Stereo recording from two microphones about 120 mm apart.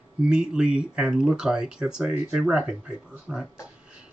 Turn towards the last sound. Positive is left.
turn(degrees=-10)  # may be behind; listen again after turning